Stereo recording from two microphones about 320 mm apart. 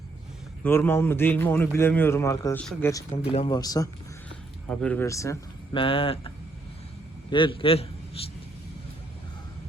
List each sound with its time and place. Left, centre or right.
0.6 s a man's voice: centre
3.2 s a man's voice: centre